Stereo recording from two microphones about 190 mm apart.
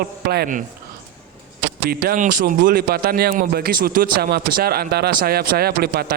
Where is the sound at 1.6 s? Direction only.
55° right (ahead or behind).